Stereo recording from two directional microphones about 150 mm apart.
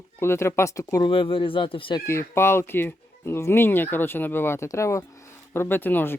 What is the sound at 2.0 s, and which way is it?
Speech, 15° left (ahead or behind).